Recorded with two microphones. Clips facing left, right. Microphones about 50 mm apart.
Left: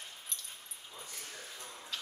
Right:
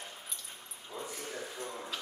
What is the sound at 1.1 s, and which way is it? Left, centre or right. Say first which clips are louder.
Dog: right 7 dB; centre.